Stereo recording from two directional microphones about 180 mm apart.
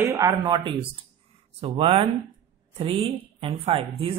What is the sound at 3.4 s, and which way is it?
Speech, 35° right (ahead or behind).